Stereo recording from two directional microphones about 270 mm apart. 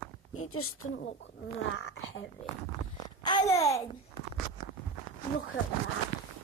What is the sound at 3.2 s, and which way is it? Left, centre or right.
Speech, centre.